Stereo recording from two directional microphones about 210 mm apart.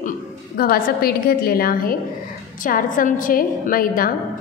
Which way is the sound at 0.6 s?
45° left (ahead or behind).